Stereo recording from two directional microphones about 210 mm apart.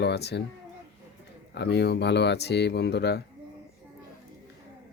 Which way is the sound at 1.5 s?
50° left (ahead or behind).